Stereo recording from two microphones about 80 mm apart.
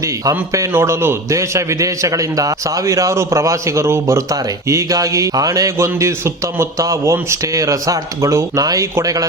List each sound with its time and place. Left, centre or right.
0.7 s a man's voice: right
5.7 s a man's voice: right